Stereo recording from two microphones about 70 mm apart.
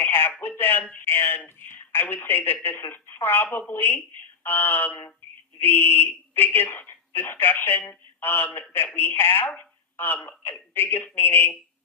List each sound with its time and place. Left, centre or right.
0.0 s telephone: left
0.6 s speech: left
3.7 s a sound: left
5.5 s speech: left